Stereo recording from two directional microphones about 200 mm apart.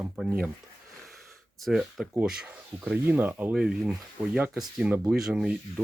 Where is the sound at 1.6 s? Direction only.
Centre (ahead or behind).